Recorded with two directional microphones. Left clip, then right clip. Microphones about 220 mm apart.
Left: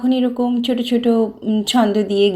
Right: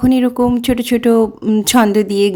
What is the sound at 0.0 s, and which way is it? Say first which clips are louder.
Speech: right 5 dB; 50° right (ahead or behind).